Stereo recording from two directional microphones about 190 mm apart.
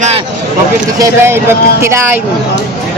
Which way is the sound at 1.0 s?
15° right (ahead or behind).